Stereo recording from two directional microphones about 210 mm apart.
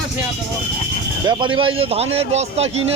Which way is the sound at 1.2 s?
20° right (ahead or behind).